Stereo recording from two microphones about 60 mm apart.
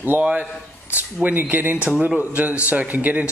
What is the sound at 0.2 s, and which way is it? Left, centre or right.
Speech, centre.